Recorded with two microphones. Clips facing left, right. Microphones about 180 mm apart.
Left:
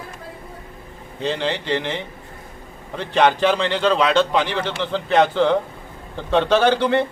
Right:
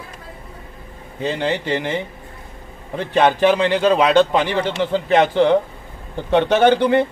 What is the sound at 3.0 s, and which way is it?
A man's voice, 15° right (ahead or behind).